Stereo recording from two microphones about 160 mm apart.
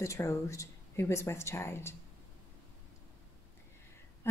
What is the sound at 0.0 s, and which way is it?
A woman's voice, 20° left (ahead or behind).